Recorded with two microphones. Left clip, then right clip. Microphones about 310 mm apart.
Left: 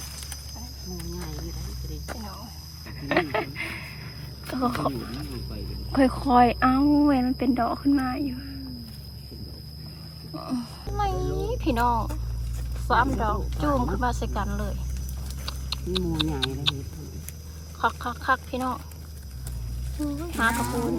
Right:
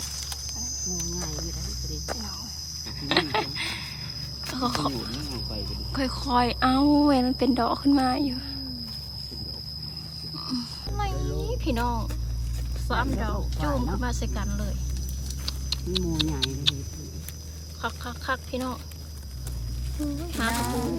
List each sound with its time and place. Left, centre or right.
1.2 s speech: centre
2.0 s speech: centre
10.3 s a sound: centre
12.9 s speech: centre
17.7 s speech: centre
20.1 s speech: centre